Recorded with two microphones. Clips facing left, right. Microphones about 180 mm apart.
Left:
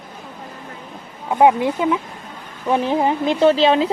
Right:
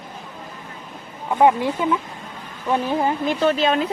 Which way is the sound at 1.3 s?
15° left (ahead or behind).